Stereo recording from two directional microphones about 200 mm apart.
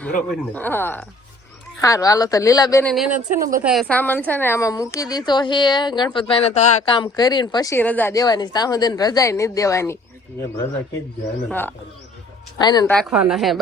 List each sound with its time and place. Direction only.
0.0 s speech: 5° left (ahead or behind)
2.8 s a woman's voice: centre (ahead or behind); by 6.7 s 35° left (ahead or behind)
6.8 s speech: 20° left (ahead or behind)
11.4 s speech: 10° left (ahead or behind)
12.5 s speech: 20° left (ahead or behind)
12.9 s a woman's voice: centre (ahead or behind)